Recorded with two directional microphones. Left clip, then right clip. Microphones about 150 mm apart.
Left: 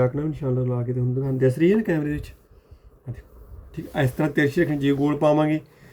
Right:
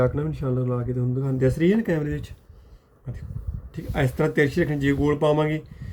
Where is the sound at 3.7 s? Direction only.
20° left (ahead or behind).